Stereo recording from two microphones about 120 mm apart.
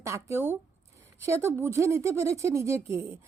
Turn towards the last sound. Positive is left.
turn(degrees=-25)  # may be behind; listen again after turning